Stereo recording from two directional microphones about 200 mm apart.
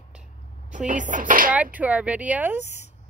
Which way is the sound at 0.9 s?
40° right (ahead or behind).